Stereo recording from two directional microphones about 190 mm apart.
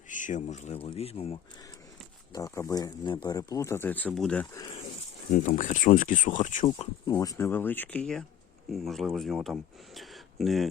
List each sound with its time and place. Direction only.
0.1 s speech: 40° left (ahead or behind)
2.3 s speech: 15° left (ahead or behind)
5.3 s speech: 40° left (ahead or behind)
7.1 s speech: 15° left (ahead or behind)